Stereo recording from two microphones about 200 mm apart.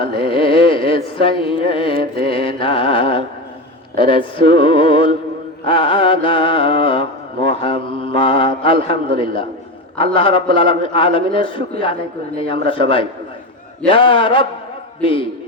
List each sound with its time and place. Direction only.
0.2 s mantra: 25° left (ahead or behind)
9.1 s a man's voice: 25° left (ahead or behind)
10.2 s mantra: 25° left (ahead or behind)